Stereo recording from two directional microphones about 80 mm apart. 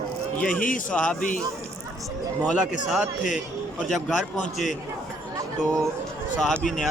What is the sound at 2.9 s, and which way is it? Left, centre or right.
Speech, centre.